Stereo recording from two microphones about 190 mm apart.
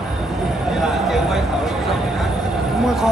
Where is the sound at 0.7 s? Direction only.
Centre (ahead or behind).